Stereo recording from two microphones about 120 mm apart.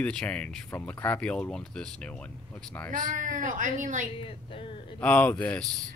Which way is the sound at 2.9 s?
90° right.